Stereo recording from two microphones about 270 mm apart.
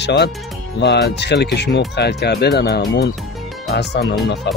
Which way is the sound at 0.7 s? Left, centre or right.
Left.